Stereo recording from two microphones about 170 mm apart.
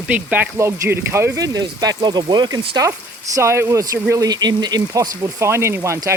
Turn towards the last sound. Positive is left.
turn(degrees=-15)  # may be behind; listen again after turning